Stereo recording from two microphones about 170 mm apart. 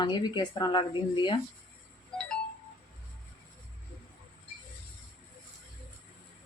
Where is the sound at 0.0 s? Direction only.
25° left (ahead or behind).